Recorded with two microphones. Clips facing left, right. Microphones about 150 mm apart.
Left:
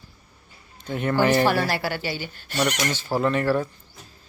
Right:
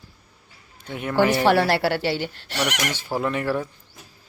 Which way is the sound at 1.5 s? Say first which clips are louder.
Right 4 dB; 70° right (ahead or behind).